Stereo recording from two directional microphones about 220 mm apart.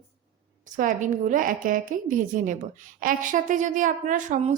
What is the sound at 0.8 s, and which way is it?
A woman's voice, 35° right (ahead or behind).